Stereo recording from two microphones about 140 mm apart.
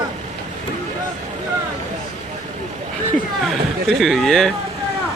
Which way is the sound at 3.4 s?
Centre (ahead or behind).